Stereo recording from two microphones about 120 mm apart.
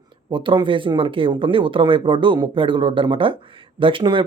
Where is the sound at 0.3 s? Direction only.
40° right (ahead or behind).